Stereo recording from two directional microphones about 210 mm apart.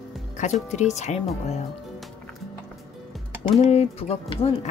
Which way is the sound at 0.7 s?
35° left (ahead or behind).